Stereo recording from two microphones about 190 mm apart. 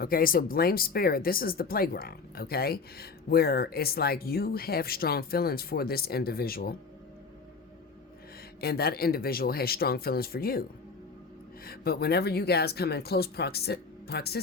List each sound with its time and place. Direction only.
0.0 s speech: 50° left (ahead or behind)
8.6 s speech: 55° left (ahead or behind)